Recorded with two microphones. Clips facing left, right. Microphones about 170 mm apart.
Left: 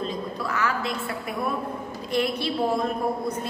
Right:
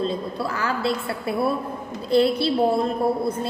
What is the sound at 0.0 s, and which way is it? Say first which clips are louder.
A woman's voice: right 4 dB; 30° right (ahead or behind).